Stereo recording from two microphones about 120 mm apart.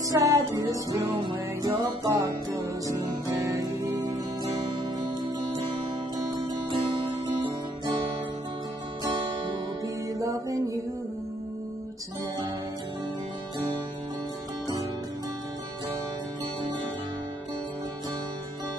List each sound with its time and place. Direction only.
0.1 s music: 30° right (ahead or behind)
6.1 s music: 40° right (ahead or behind)
7.8 s guitar: 45° right (ahead or behind)
10.1 s music: 25° right (ahead or behind)